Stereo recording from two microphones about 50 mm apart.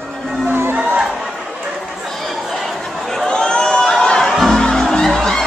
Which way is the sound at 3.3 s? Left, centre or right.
Centre.